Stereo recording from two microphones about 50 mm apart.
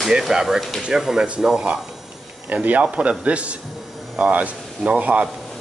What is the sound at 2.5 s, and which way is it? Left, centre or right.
Speech, right.